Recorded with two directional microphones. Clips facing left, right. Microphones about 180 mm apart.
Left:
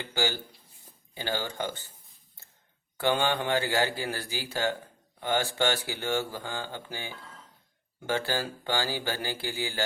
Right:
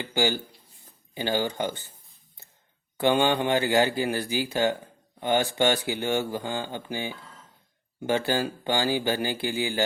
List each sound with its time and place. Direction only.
0.0 s speech: 15° right (ahead or behind)
3.0 s speech: 15° right (ahead or behind)